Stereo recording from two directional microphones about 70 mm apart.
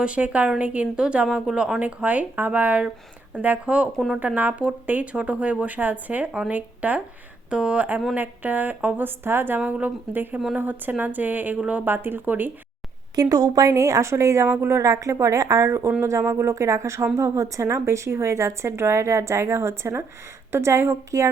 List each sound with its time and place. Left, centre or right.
0.0 s a woman's voice: centre
9.6 s a woman's voice: centre
11.5 s a woman's voice: centre
11.9 s a woman's voice: right
13.1 s a woman's voice: right